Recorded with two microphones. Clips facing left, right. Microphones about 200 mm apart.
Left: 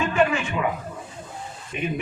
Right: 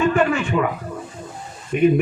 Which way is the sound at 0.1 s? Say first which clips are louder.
Right 3 dB; 55° right (ahead or behind).